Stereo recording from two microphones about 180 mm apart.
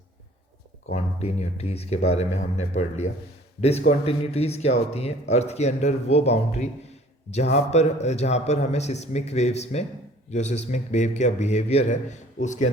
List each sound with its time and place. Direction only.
0.9 s speech: 40° left (ahead or behind)